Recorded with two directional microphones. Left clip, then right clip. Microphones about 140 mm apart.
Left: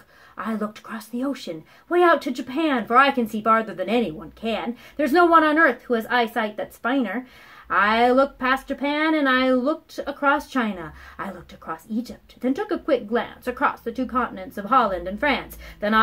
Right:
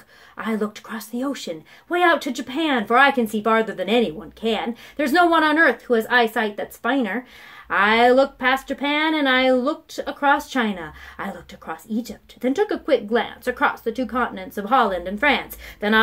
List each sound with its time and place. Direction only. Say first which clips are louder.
0.4 s speech: right 3 dB; 30° right (ahead or behind)